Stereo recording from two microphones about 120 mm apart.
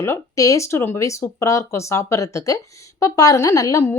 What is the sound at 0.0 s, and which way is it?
Speech, 25° left (ahead or behind).